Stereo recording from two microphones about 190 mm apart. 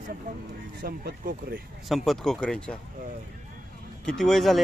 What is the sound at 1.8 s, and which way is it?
Speech, centre (ahead or behind).